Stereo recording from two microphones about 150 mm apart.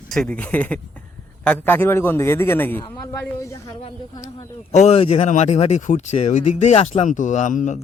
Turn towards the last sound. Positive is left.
turn(degrees=55)  # may be behind; listen again after turning